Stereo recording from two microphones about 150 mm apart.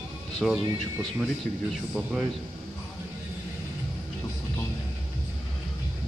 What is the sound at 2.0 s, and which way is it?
Speech, 5° right (ahead or behind).